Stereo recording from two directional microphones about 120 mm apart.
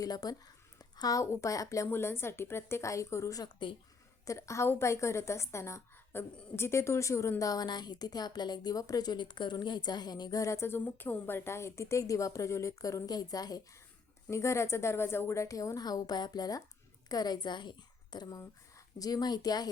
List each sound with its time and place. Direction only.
0.0 s a woman's voice: 30° left (ahead or behind)
4.3 s a woman's voice: 25° left (ahead or behind)